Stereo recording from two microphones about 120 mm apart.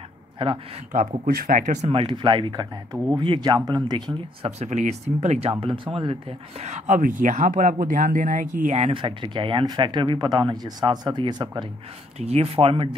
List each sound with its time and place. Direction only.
0.4 s speech: 45° right (ahead or behind)
1.5 s speech: 90° right
1.9 s speech: 45° right (ahead or behind)
4.5 s speech: 70° right (ahead or behind)
5.5 s speech: 45° right (ahead or behind)
6.6 s speech: 85° right
8.9 s speech: 45° right (ahead or behind)
12.2 s speech: 60° right (ahead or behind)